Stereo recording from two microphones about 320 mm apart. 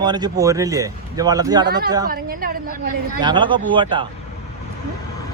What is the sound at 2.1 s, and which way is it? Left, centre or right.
Speech, right.